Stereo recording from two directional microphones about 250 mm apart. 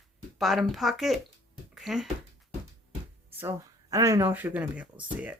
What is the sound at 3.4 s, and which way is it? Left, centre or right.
Speech, centre.